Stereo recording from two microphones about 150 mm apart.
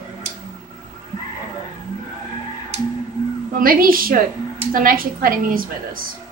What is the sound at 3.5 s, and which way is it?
A woman's voice, 70° right (ahead or behind).